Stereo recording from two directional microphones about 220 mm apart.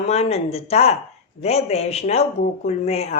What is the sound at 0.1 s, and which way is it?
Speech, 30° left (ahead or behind).